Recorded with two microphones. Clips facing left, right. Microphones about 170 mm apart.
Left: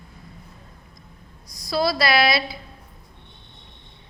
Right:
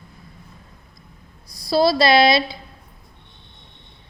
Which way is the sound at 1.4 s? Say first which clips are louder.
Right 5 dB; 30° right (ahead or behind).